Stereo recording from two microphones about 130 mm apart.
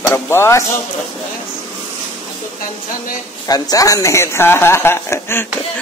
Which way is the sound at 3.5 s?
30° left (ahead or behind).